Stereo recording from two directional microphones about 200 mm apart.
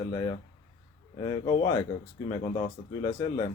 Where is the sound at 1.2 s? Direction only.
20° left (ahead or behind).